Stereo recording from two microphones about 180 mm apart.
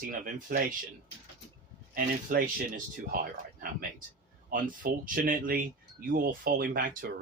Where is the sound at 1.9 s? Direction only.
50° right (ahead or behind).